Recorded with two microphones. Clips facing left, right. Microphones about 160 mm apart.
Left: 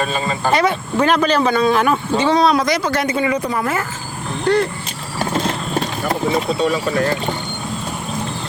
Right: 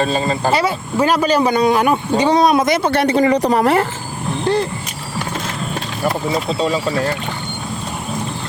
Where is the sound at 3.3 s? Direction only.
75° right (ahead or behind).